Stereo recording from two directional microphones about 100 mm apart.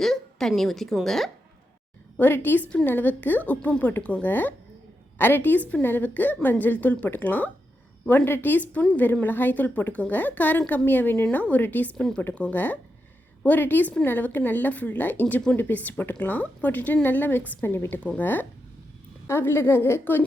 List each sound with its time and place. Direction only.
0.0 s a woman's voice: 5° left (ahead or behind)
2.1 s a woman's voice: 20° left (ahead or behind)